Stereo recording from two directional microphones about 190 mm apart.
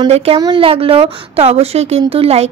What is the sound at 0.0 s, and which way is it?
A woman's voice, 30° right (ahead or behind).